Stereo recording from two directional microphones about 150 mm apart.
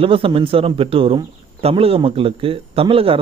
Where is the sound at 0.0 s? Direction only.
35° right (ahead or behind).